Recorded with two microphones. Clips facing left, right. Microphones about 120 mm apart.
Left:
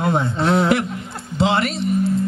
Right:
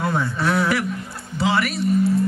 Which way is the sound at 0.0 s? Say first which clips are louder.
Left 3 dB; 25° left (ahead or behind).